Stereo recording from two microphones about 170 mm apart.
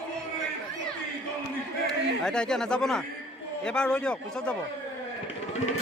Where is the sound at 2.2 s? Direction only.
5° left (ahead or behind).